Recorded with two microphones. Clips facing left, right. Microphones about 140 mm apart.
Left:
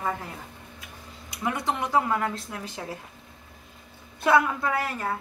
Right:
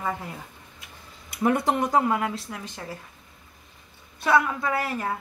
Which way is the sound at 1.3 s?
50° right (ahead or behind).